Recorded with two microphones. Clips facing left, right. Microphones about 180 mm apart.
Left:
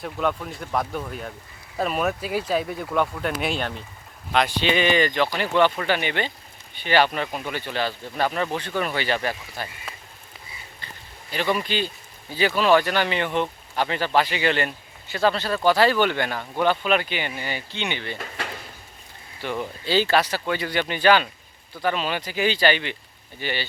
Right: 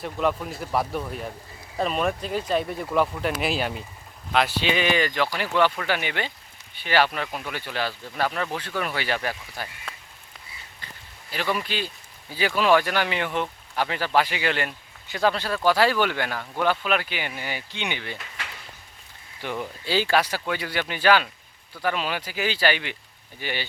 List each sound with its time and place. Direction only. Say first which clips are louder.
0.0 s speech: right 1 dB; centre (ahead or behind)
9.9 s a sound: left 1 dB; 5° left (ahead or behind)
11.3 s speech: left 3 dB; 5° right (ahead or behind)
18.2 s drawer open or close: left 7 dB; 45° left (ahead or behind)
19.4 s speech: left 2 dB; 15° right (ahead or behind)